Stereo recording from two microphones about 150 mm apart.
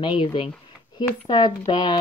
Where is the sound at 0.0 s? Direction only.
35° left (ahead or behind).